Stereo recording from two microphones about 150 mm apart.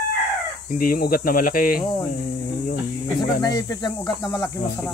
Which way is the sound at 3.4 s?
25° left (ahead or behind).